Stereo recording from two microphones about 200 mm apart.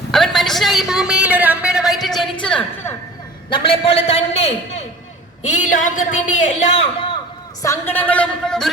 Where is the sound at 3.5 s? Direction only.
25° left (ahead or behind).